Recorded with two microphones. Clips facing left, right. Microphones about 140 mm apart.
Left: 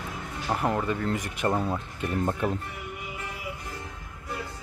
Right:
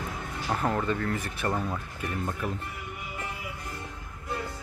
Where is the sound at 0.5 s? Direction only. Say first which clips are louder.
Left 1 dB; 10° left (ahead or behind); by 2.5 s 35° left (ahead or behind).